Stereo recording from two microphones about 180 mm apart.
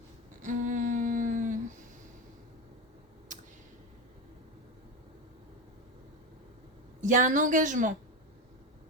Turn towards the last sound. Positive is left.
turn(degrees=-45)  # may be behind; listen again after turning